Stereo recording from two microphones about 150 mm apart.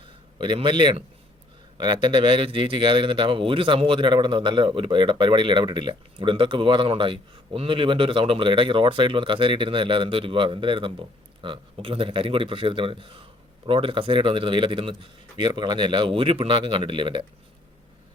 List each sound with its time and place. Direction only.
0.3 s speech: 35° right (ahead or behind)